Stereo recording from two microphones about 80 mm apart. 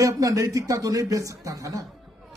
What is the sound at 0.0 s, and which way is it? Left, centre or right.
A man's voice, right.